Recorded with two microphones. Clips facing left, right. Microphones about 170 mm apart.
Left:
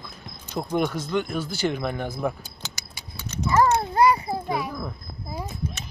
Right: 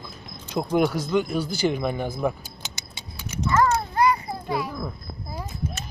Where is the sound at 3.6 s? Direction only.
25° left (ahead or behind).